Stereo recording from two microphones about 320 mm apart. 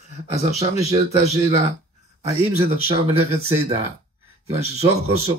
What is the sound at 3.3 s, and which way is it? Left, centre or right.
Speech, centre.